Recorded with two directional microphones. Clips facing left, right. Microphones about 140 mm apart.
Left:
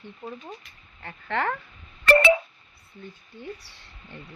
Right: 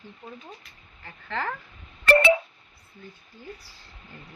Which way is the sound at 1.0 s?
65° left (ahead or behind).